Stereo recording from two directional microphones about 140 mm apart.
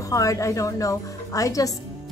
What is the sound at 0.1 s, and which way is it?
Speech, 25° left (ahead or behind).